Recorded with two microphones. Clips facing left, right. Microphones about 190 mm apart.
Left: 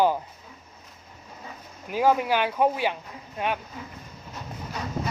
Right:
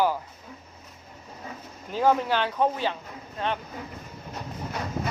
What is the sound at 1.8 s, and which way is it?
Speech, 10° left (ahead or behind).